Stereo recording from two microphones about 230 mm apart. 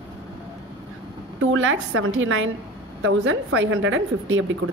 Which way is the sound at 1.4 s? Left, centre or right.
Right.